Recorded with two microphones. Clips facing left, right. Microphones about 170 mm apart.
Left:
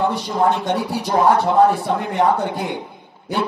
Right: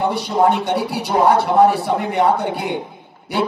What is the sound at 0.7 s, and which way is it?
Music, 70° right (ahead or behind).